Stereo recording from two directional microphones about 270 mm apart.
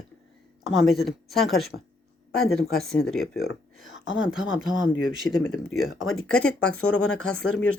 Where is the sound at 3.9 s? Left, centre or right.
Left.